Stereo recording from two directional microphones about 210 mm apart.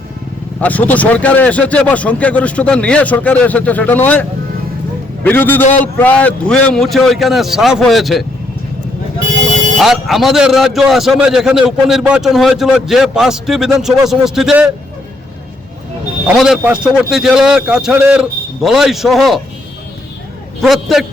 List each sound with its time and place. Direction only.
0.6 s a man's voice: 5° left (ahead or behind)
9.7 s a man's voice: centre (ahead or behind)
16.2 s a man's voice: 5° right (ahead or behind)
20.6 s a man's voice: centre (ahead or behind)